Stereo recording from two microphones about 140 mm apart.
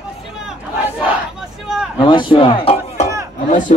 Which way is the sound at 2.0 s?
35° left (ahead or behind).